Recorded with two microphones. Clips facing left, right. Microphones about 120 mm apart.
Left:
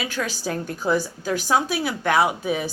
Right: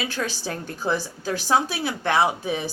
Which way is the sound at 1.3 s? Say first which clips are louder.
Left 1 dB; 30° right (ahead or behind).